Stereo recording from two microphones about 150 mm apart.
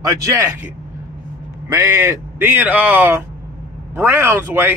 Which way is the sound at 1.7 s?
15° right (ahead or behind).